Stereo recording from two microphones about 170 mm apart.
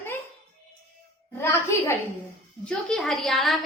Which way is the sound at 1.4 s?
15° left (ahead or behind).